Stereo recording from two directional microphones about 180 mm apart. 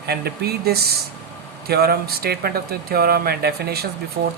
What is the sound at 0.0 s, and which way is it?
Speech, 60° right (ahead or behind).